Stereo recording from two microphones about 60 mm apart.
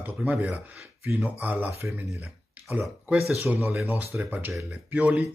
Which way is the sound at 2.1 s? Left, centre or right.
Right.